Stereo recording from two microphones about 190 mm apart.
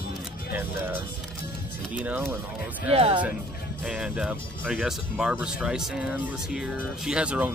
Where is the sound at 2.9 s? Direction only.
30° right (ahead or behind).